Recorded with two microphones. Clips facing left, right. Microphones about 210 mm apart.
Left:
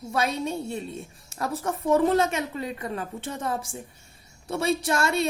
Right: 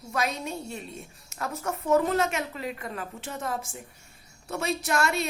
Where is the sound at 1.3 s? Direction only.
30° left (ahead or behind).